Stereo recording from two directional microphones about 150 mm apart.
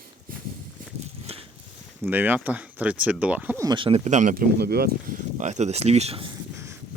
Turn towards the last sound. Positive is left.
turn(degrees=-40)  # may be behind; listen again after turning